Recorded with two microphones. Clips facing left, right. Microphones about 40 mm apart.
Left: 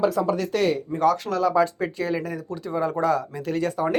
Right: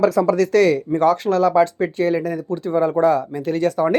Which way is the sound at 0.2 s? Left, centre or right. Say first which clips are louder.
Right 6 dB; right.